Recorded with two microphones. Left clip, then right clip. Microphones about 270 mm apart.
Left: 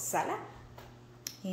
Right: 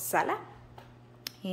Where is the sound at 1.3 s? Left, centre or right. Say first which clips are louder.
Right 2 dB; centre.